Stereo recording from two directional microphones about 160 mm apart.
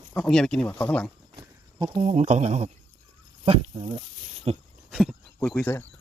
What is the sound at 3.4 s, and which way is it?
Speech, 35° right (ahead or behind).